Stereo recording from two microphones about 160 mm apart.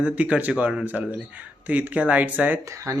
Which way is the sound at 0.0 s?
10° right (ahead or behind).